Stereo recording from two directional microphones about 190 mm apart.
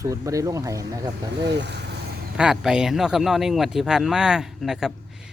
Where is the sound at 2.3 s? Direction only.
5° right (ahead or behind).